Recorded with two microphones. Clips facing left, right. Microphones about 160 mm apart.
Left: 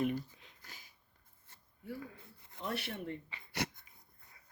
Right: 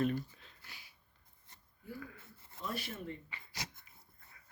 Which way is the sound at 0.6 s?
45° left (ahead or behind).